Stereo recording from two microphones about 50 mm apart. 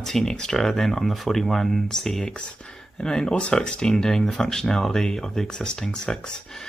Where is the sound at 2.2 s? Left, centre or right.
Left.